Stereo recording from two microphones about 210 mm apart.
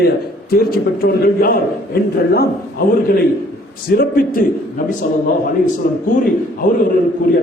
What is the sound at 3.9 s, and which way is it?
Speech, 45° left (ahead or behind).